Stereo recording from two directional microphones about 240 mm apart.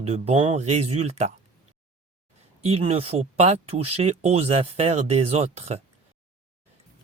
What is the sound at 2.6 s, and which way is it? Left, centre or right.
Speech, right.